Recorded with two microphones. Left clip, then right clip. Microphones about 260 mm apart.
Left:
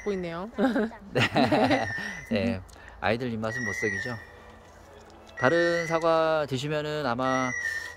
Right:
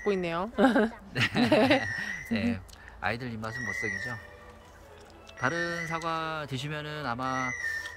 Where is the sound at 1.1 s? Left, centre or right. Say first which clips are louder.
Left 7 dB; centre.